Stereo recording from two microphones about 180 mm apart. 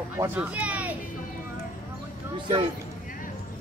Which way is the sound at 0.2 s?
10° right (ahead or behind).